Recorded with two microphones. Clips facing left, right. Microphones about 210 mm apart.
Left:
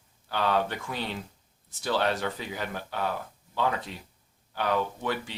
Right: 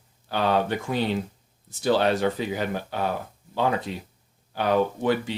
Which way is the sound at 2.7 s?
30° right (ahead or behind).